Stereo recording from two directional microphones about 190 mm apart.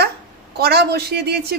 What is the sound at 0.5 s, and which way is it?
A man's voice, 55° right (ahead or behind).